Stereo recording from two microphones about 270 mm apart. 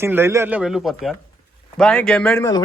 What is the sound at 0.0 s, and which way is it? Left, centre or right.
Speech, centre.